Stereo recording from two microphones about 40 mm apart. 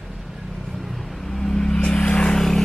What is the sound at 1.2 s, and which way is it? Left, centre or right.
Vehicle, centre.